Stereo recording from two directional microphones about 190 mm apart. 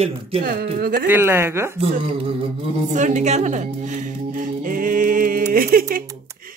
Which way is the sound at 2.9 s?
40° right (ahead or behind).